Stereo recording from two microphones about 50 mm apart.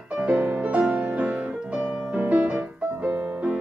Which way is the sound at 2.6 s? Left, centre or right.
Right.